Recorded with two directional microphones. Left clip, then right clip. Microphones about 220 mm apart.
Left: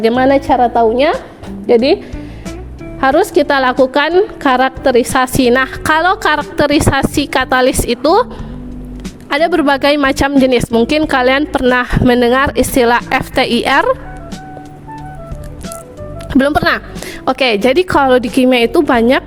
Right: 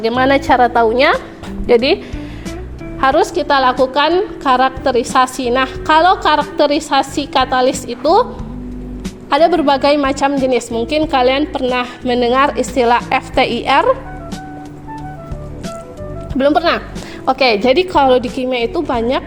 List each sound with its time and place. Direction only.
0.0 s a woman's voice: 35° left (ahead or behind)
3.0 s a woman's voice: 40° left (ahead or behind)
9.3 s a woman's voice: 50° left (ahead or behind)
16.3 s a woman's voice: 50° left (ahead or behind)